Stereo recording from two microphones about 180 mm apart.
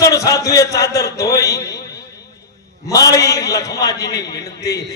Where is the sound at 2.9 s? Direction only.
20° left (ahead or behind).